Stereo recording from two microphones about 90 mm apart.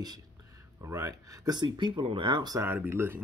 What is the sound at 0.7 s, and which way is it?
Speech, 35° right (ahead or behind).